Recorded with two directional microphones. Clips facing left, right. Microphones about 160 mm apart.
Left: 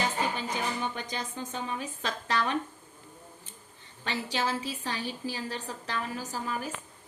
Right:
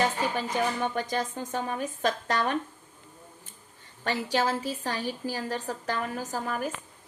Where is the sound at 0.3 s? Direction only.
50° right (ahead or behind).